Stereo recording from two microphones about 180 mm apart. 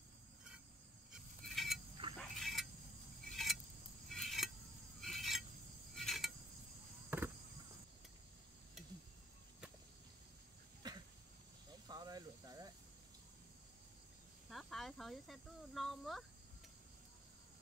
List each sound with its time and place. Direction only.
1.1 s a sound: centre (ahead or behind)
5.9 s cricket: centre (ahead or behind)
7.1 s insect: 10° right (ahead or behind)
10.8 s a sound: 20° right (ahead or behind)
11.9 s snake: 20° right (ahead or behind)
14.5 s speech: centre (ahead or behind)